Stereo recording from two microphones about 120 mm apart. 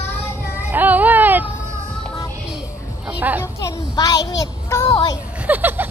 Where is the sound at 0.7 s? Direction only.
15° right (ahead or behind).